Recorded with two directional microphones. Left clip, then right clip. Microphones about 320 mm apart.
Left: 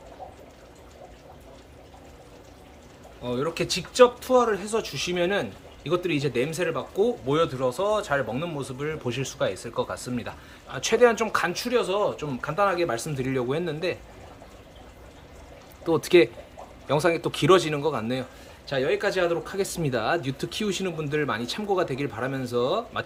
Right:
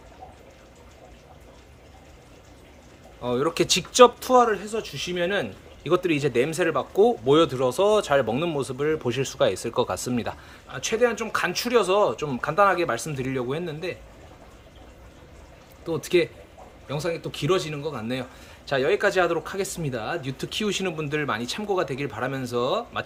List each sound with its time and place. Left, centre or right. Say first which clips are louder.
3.2 s speech: right 4 dB; centre
10.7 s speech: left 3 dB; centre
15.9 s speech: left 4 dB; centre
18.6 s speech: right 3 dB; centre